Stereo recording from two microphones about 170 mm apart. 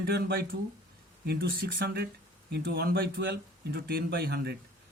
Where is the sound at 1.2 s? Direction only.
70° right (ahead or behind).